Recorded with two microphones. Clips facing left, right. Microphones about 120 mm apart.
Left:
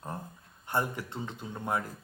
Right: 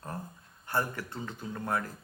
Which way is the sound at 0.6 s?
20° left (ahead or behind).